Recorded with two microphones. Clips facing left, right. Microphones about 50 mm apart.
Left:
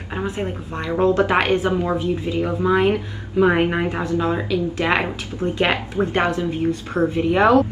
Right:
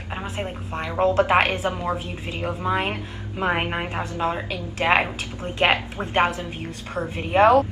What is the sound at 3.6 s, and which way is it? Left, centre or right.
Speech, centre.